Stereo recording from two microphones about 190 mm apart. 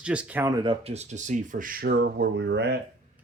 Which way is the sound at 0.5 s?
25° right (ahead or behind).